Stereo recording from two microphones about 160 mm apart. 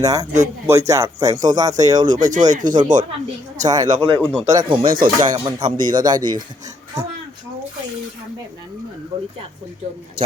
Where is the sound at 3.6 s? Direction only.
25° right (ahead or behind).